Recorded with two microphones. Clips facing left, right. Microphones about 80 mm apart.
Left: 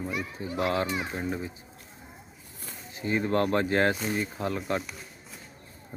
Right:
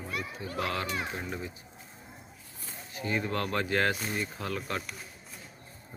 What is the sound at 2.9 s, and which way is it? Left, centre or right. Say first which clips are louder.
Speech: left 5 dB; left.